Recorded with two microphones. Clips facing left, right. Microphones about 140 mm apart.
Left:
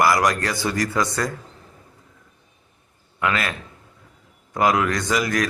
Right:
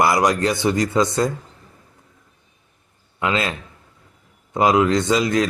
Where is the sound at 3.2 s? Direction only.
25° right (ahead or behind).